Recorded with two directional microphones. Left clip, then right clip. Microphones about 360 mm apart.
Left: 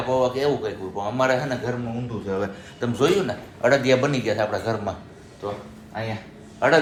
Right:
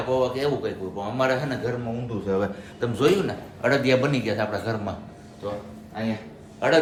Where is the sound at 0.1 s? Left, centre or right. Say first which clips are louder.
Left 2 dB; centre.